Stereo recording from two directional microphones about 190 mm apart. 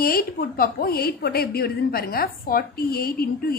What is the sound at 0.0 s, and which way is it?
A woman's voice, 50° left (ahead or behind).